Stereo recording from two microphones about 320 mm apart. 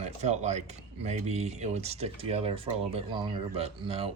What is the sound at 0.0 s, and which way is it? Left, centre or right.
Speech, right.